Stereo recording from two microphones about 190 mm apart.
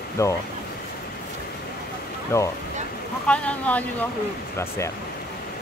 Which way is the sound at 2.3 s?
15° left (ahead or behind).